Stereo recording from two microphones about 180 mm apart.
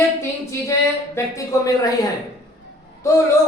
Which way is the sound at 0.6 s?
15° left (ahead or behind).